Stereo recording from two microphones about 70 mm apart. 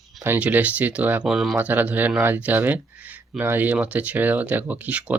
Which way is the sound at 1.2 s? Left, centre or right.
Centre.